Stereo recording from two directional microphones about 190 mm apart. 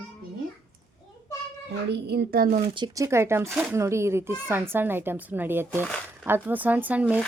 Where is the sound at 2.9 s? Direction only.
15° right (ahead or behind).